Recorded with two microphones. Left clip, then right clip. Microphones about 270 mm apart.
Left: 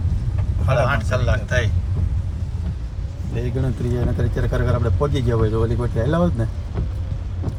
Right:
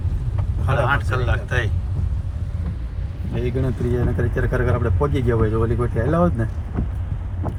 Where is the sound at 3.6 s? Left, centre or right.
Centre.